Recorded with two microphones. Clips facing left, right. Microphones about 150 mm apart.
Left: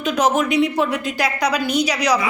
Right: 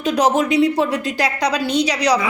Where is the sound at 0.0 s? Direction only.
35° right (ahead or behind).